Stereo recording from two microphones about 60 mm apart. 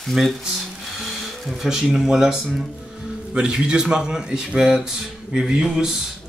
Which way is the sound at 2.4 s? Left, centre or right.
Centre.